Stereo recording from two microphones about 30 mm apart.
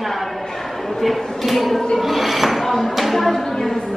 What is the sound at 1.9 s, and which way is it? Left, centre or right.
Music, centre.